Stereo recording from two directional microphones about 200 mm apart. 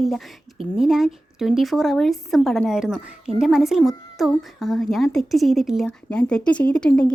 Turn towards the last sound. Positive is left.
turn(degrees=5)  # may be behind; listen again after turning